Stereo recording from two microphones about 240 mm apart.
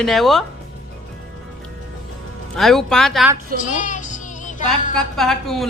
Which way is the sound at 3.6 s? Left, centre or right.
Left.